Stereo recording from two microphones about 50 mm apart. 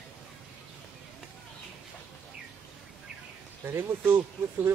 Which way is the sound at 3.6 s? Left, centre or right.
Right.